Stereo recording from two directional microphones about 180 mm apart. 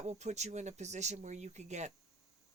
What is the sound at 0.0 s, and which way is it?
Speech, 40° right (ahead or behind).